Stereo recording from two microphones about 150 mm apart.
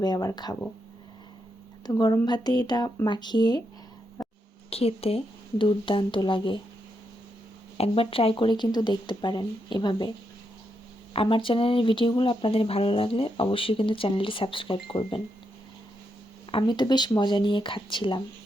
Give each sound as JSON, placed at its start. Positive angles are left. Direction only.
{"t": 0.0, "sound": "speech", "side_deg": 25}
{"t": 1.9, "sound": "speech", "side_deg": 25}
{"t": 4.7, "sound": "speech", "side_deg": 40}
{"t": 7.8, "sound": "speech", "side_deg": 40}
{"t": 11.1, "sound": "speech", "side_deg": 35}
{"t": 16.5, "sound": "speech", "side_deg": 35}